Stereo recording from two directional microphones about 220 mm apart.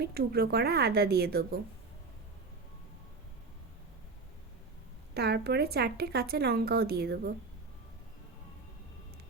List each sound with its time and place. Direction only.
0.0 s a woman's voice: 45° right (ahead or behind)
5.1 s a woman's voice: 45° right (ahead or behind)